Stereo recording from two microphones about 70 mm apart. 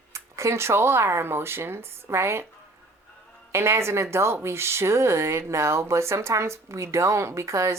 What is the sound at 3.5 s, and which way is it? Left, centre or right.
Speech, right.